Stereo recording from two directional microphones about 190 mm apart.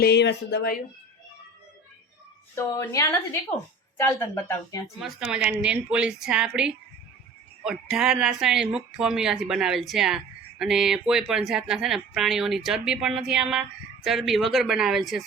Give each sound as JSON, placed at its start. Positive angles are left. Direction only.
{"t": 0.0, "sound": "speech", "side_deg": 65}
{"t": 2.6, "sound": "speech", "side_deg": 15}
{"t": 4.9, "sound": "speech", "side_deg": -5}